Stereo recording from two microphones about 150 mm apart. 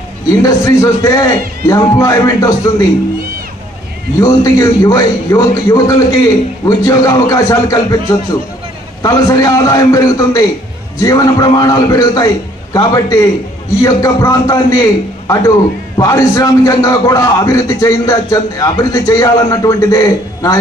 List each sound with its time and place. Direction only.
0.4 s a man's voice: 20° left (ahead or behind)
4.2 s a man's voice: 20° left (ahead or behind)